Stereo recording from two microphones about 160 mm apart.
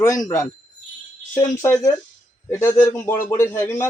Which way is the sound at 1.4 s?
15° left (ahead or behind).